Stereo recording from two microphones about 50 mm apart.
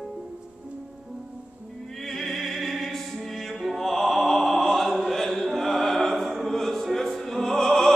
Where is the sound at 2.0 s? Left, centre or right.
Centre.